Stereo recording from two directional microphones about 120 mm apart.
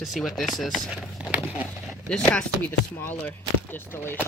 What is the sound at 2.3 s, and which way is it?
Chopping, 15° left (ahead or behind).